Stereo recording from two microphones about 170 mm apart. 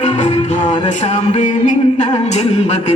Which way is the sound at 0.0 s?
40° left (ahead or behind).